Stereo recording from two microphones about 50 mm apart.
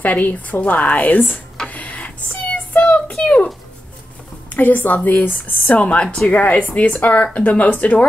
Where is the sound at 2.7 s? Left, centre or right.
Left.